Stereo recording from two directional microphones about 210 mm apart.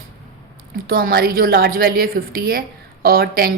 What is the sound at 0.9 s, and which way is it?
A woman's voice, 45° right (ahead or behind).